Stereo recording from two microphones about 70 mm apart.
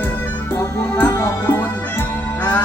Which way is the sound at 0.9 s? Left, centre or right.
Left.